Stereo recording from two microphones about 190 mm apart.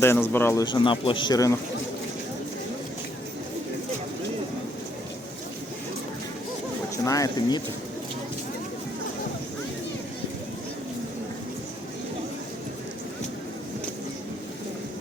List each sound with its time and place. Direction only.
0.0 s speech: 10° left (ahead or behind)
0.6 s speech: 25° left (ahead or behind)
6.9 s speech: 15° left (ahead or behind)